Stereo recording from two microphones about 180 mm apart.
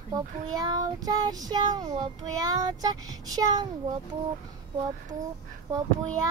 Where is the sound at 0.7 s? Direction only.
20° right (ahead or behind).